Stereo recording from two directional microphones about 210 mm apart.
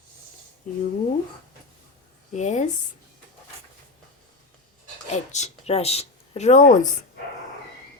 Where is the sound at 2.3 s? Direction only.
35° left (ahead or behind).